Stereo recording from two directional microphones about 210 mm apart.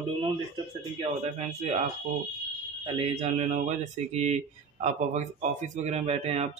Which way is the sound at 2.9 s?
30° right (ahead or behind).